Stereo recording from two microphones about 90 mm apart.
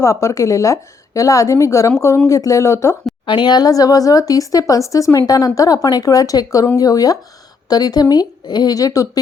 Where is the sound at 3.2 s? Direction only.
55° left (ahead or behind).